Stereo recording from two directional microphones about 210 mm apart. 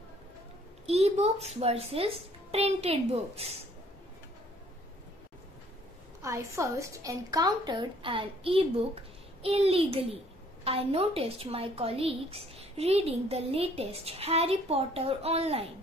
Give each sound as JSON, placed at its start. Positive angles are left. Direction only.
{"t": 0.8, "sound": "a woman's voice", "side_deg": -30}
{"t": 6.2, "sound": "a woman's voice", "side_deg": -15}